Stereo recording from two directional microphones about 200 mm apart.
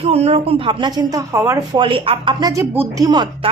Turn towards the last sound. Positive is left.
turn(degrees=-20)  # may be behind; listen again after turning